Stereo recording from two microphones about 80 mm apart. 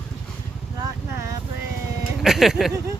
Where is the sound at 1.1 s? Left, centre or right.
Right.